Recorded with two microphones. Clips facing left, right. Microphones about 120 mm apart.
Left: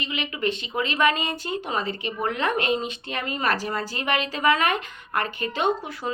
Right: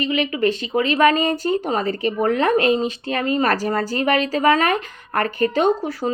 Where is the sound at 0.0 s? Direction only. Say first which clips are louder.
Right 8 dB; 45° right (ahead or behind).